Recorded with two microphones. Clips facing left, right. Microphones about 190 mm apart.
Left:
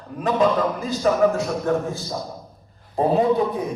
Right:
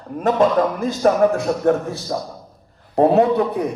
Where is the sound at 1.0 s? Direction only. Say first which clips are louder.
Right 3 dB; 60° right (ahead or behind).